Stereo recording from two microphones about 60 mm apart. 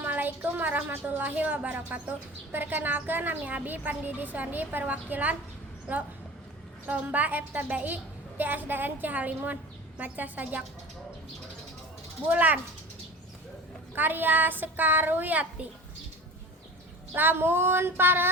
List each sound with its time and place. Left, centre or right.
0.0 s a woman's voice: right
6.8 s a woman's voice: right
8.4 s child singing: right
10.0 s a woman's voice: right
12.3 s a woman's voice: right
13.9 s child singing: right
17.2 s child singing: right